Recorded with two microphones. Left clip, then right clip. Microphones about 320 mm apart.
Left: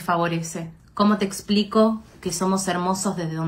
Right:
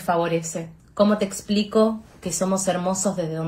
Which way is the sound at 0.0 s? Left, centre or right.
Centre.